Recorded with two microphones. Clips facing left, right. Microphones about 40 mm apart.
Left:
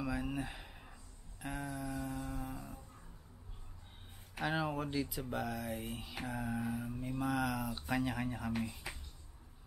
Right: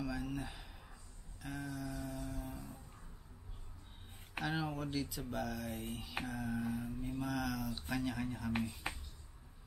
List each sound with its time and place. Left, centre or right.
0.0 s a sound: centre
4.5 s speech: centre
8.8 s finger snapping: right